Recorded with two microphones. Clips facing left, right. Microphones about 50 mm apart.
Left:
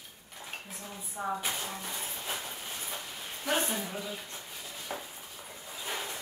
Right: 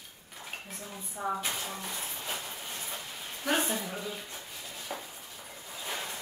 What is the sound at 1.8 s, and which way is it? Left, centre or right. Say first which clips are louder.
Music: even; centre.